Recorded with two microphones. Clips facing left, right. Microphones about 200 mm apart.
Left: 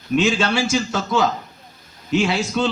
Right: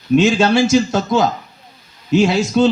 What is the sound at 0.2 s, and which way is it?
A man's voice, 40° right (ahead or behind).